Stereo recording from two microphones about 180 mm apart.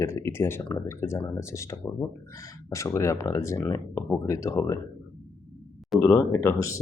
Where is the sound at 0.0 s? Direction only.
15° left (ahead or behind).